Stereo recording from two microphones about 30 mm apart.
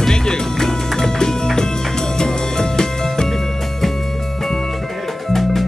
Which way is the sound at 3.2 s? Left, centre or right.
Centre.